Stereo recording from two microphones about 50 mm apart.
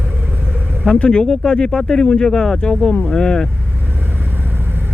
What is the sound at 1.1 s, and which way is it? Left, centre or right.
Speech, centre.